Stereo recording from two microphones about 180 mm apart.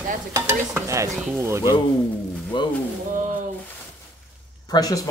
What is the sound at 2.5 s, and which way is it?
Speech, 25° left (ahead or behind).